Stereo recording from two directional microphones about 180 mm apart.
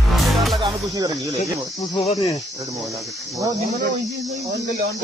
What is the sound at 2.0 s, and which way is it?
Cricket, 30° left (ahead or behind).